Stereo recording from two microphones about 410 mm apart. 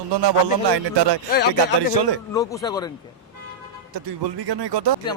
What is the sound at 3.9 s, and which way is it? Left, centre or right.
Music, right.